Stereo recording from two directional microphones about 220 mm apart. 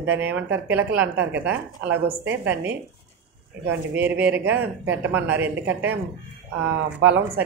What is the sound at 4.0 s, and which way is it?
Speech, 5° right (ahead or behind).